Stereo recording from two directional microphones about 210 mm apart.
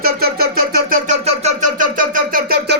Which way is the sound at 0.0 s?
45° right (ahead or behind).